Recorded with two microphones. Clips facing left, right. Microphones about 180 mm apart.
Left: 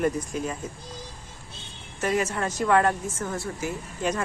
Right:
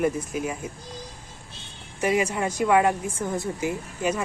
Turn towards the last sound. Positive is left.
turn(degrees=-10)  # may be behind; listen again after turning